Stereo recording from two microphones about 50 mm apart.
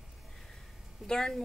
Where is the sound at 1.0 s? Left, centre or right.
Centre.